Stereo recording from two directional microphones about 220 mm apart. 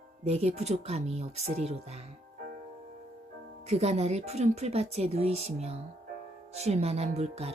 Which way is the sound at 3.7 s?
30° right (ahead or behind).